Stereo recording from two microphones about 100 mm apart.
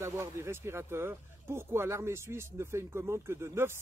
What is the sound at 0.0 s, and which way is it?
Speech, 30° right (ahead or behind).